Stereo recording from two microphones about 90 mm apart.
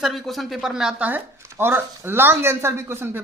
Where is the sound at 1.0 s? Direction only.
25° right (ahead or behind).